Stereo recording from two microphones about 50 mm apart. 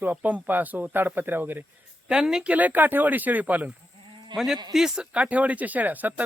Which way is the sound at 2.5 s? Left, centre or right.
Right.